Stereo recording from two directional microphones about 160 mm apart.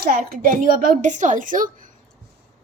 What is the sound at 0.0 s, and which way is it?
A woman's voice, 60° right (ahead or behind).